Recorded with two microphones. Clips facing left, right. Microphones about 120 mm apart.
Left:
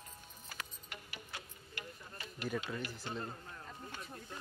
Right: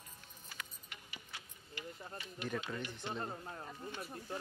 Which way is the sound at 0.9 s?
50° left (ahead or behind).